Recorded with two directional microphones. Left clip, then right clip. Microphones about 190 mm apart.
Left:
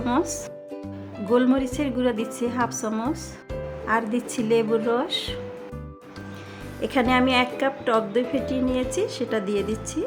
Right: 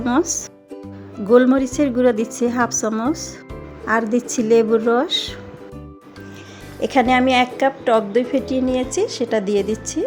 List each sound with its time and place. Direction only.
0.2 s speech: centre (ahead or behind)
1.3 s a woman's voice: 20° right (ahead or behind)
6.8 s a woman's voice: 15° right (ahead or behind)